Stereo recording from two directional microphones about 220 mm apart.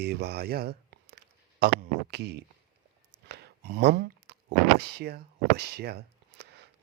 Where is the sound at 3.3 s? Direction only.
45° right (ahead or behind).